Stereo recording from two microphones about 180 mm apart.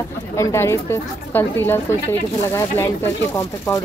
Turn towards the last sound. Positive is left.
turn(degrees=15)  # may be behind; listen again after turning